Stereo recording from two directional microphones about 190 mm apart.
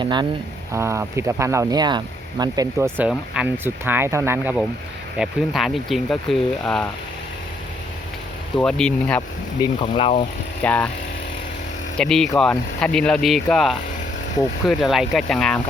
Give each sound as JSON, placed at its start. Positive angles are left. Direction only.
{"t": 0.0, "sound": "speech", "side_deg": -25}
{"t": 8.5, "sound": "speech", "side_deg": 5}
{"t": 9.6, "sound": "speech", "side_deg": 25}
{"t": 10.6, "sound": "speech", "side_deg": 5}
{"t": 11.9, "sound": "speech", "side_deg": 0}